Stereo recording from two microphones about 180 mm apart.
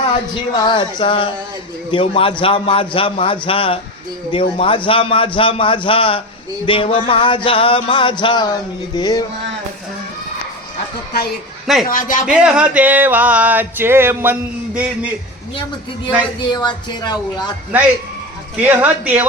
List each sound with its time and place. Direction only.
0.6 s a man's voice: 25° left (ahead or behind)
11.6 s a man's voice: centre (ahead or behind)
11.9 s a man's voice: 50° left (ahead or behind)
12.2 s a sound: 5° right (ahead or behind)
16.4 s a man's voice: 25° left (ahead or behind)
18.6 s a sound: 10° right (ahead or behind)